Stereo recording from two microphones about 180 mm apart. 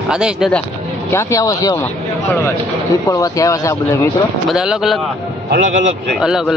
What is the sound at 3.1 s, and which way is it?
Speech, 20° left (ahead or behind).